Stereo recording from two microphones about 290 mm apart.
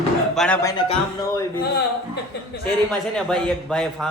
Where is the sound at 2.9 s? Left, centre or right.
Centre.